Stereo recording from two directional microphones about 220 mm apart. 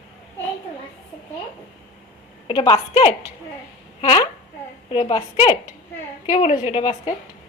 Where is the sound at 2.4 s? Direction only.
20° left (ahead or behind).